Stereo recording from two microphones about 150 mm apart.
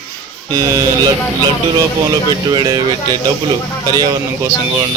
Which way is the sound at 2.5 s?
30° right (ahead or behind).